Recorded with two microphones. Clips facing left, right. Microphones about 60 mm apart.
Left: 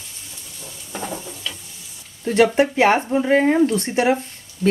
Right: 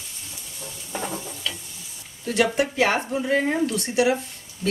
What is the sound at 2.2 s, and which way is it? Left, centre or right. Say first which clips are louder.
Speech: left 6 dB; left.